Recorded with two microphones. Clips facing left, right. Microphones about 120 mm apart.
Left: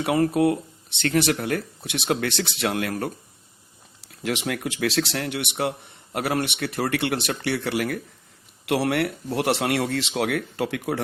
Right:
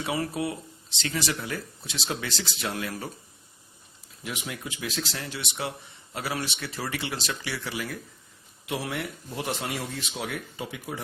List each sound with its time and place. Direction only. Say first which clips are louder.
0.0 s speech: left 9 dB; 55° left (ahead or behind)
4.1 s speech: left 9 dB; 90° left